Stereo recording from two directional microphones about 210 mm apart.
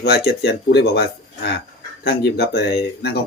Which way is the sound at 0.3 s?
50° left (ahead or behind).